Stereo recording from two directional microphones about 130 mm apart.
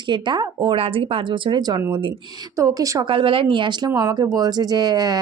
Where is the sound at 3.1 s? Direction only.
45° right (ahead or behind).